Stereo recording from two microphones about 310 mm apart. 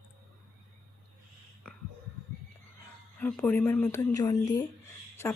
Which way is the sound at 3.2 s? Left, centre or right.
Centre.